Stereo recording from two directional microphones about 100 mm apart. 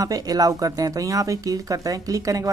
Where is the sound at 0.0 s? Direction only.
40° right (ahead or behind).